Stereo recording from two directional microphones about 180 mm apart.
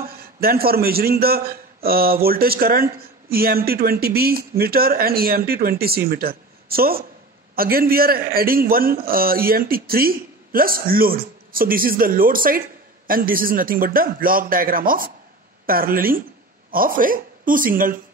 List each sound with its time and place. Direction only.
0.2 s a man's voice: 55° right (ahead or behind)